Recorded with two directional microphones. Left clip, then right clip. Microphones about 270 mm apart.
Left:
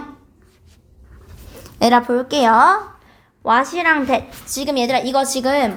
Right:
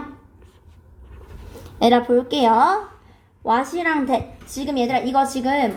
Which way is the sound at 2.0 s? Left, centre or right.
Left.